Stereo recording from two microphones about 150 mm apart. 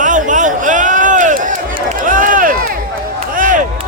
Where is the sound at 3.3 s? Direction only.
60° right (ahead or behind).